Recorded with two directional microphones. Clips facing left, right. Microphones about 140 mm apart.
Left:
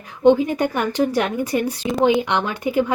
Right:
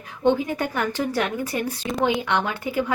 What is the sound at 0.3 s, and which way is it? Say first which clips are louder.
A woman's voice: left 6 dB; 20° left (ahead or behind).